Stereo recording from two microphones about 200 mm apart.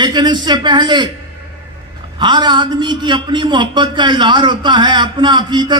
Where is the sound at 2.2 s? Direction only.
20° right (ahead or behind).